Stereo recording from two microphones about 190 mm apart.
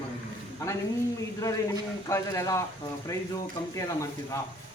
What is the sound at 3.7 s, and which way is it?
Speech, 15° left (ahead or behind).